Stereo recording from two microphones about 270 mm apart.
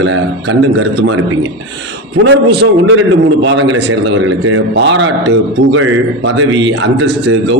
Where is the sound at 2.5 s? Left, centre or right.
Right.